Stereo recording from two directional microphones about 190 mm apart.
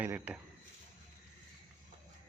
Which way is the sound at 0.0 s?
10° right (ahead or behind).